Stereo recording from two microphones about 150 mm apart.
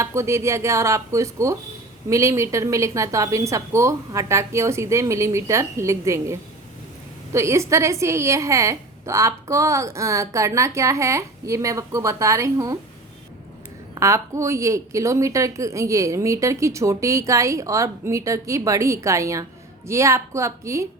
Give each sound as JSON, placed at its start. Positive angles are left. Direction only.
{"t": 0.0, "sound": "a woman's voice", "side_deg": -20}
{"t": 13.9, "sound": "a woman's voice", "side_deg": -20}